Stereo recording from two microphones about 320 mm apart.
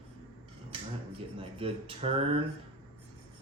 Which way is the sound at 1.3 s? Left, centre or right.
Centre.